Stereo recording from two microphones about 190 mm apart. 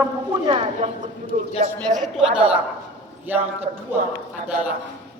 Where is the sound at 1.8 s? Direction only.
Centre (ahead or behind).